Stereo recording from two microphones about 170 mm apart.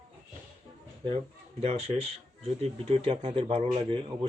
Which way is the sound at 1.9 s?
40° right (ahead or behind).